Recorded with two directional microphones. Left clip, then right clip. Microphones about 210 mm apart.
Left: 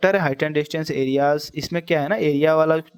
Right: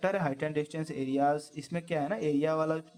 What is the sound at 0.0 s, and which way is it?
Speech, 35° left (ahead or behind).